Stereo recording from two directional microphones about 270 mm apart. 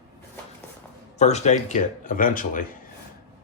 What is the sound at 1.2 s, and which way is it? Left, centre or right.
Speech, left.